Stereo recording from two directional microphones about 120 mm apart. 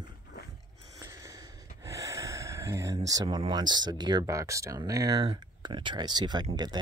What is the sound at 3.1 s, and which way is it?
Speech, 35° right (ahead or behind).